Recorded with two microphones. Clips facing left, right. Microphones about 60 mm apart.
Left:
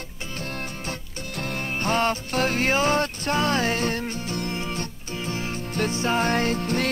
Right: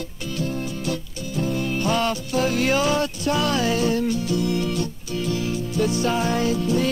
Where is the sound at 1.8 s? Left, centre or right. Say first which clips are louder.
Left 2 dB; left.